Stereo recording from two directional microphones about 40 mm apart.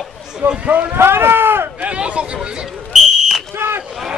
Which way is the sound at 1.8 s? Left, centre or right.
Right.